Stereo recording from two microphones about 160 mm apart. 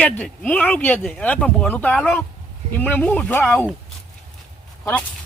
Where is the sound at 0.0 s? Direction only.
10° left (ahead or behind).